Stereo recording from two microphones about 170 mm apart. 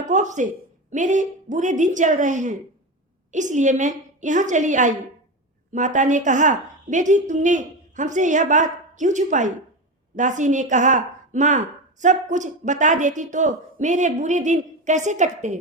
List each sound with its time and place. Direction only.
0.0 s a woman's voice: 45° right (ahead or behind)